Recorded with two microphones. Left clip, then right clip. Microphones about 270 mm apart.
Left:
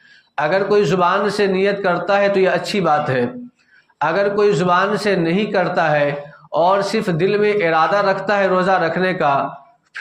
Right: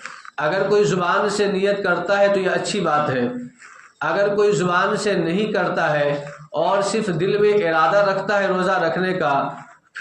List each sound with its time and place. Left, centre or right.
0.3 s a man's voice: left